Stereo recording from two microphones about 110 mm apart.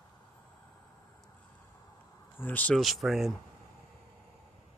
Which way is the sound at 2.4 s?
15° left (ahead or behind).